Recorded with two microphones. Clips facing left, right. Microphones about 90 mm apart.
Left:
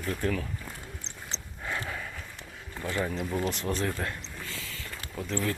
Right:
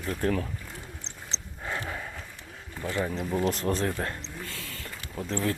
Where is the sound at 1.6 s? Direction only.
20° right (ahead or behind).